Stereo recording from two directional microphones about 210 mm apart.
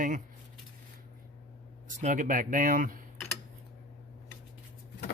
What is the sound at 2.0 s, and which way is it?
Speech, 35° right (ahead or behind).